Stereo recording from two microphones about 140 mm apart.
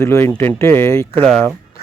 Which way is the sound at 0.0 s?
20° left (ahead or behind).